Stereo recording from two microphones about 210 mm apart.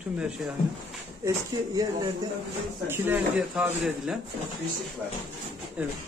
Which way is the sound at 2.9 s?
5° right (ahead or behind).